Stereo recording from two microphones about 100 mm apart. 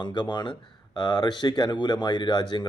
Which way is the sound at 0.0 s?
50° left (ahead or behind).